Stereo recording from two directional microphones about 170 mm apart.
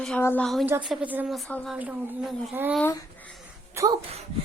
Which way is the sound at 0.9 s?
10° right (ahead or behind).